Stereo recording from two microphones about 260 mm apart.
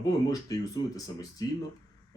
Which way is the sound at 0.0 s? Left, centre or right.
Centre.